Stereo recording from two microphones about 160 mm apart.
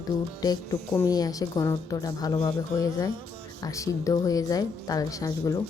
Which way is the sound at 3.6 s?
20° left (ahead or behind).